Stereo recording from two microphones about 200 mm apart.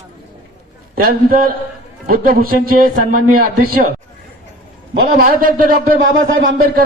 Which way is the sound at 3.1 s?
90° right.